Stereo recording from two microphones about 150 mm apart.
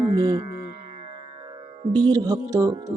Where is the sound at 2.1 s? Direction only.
25° right (ahead or behind).